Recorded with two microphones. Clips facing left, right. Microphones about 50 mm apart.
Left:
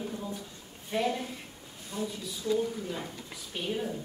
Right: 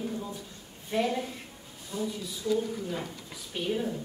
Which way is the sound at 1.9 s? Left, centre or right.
Left.